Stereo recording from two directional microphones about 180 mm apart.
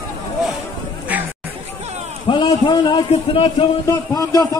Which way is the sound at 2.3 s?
25° left (ahead or behind).